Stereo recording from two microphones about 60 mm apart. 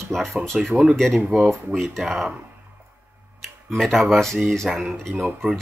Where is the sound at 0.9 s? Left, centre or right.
Centre.